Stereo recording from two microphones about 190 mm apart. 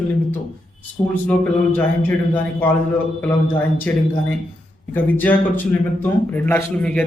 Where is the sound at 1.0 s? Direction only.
30° left (ahead or behind).